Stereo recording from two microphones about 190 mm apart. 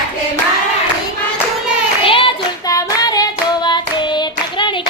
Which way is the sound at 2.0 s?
25° left (ahead or behind).